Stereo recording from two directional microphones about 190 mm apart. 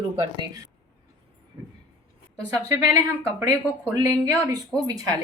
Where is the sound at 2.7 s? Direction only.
20° right (ahead or behind).